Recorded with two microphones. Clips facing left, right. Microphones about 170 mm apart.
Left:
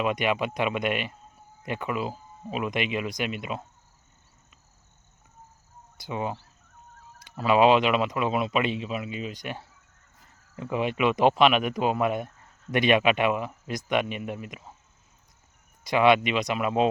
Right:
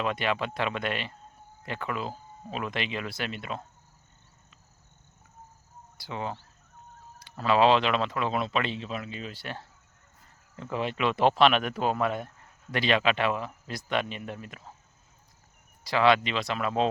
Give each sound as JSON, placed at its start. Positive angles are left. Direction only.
{"t": 0.0, "sound": "speech", "side_deg": 15}
{"t": 6.0, "sound": "speech", "side_deg": 15}
{"t": 15.8, "sound": "speech", "side_deg": 20}